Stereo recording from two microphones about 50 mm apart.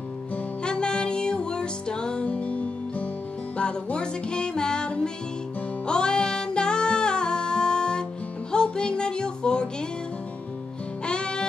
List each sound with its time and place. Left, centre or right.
0.7 s music: centre
2.2 s music: left
11.1 s music: centre